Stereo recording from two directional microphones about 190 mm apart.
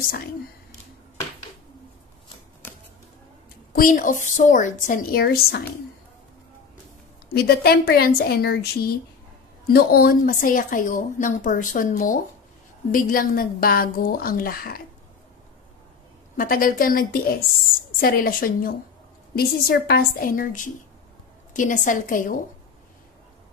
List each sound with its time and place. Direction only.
3.7 s a woman's voice: 45° left (ahead or behind)
7.3 s a woman's voice: 55° left (ahead or behind)
16.3 s a woman's voice: 50° left (ahead or behind)